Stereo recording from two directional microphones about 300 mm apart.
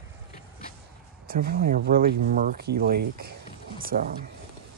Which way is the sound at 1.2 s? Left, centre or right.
Right.